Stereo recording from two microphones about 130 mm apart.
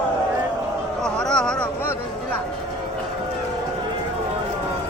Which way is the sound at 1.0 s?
5° left (ahead or behind).